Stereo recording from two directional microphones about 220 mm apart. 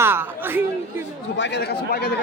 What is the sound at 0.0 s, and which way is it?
Speech, 10° right (ahead or behind).